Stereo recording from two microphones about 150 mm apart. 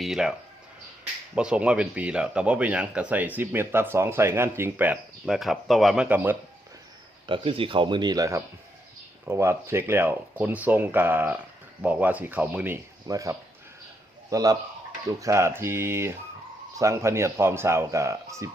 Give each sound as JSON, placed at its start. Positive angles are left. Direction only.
{"t": 0.0, "sound": "speech", "side_deg": -5}
{"t": 1.4, "sound": "speech", "side_deg": -5}
{"t": 5.2, "sound": "speech", "side_deg": 0}
{"t": 7.3, "sound": "speech", "side_deg": -35}
{"t": 13.1, "sound": "speech", "side_deg": -20}